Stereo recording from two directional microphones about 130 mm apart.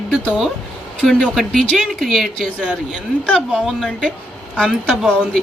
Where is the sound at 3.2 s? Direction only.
5° left (ahead or behind).